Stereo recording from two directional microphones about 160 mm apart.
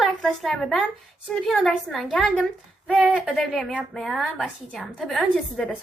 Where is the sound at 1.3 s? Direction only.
Centre (ahead or behind).